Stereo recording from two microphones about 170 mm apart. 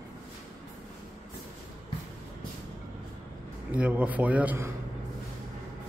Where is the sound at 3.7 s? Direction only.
5° right (ahead or behind).